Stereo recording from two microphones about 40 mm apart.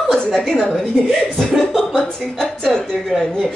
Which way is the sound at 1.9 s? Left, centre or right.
Centre.